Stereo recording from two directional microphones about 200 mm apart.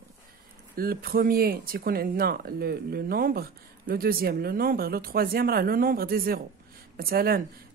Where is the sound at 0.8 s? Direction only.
45° right (ahead or behind).